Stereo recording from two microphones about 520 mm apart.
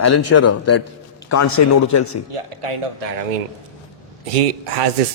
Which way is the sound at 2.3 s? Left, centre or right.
Right.